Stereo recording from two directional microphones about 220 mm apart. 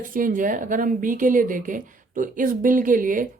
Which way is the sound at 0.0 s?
40° right (ahead or behind).